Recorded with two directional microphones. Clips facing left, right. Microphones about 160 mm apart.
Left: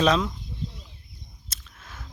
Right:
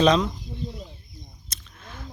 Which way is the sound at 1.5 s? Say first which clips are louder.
Right 1 dB; 5° left (ahead or behind).